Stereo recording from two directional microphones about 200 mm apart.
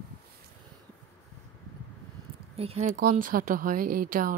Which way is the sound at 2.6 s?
35° right (ahead or behind).